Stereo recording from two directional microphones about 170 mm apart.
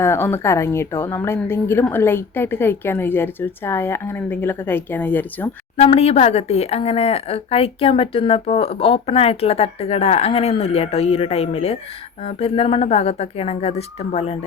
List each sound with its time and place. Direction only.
0.0 s a woman's voice: 15° left (ahead or behind)
5.7 s speech: 35° left (ahead or behind)